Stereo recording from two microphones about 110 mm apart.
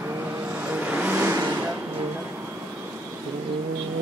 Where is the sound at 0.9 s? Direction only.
15° right (ahead or behind).